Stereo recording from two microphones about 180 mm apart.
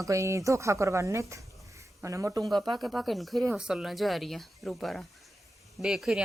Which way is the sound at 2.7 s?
Centre (ahead or behind).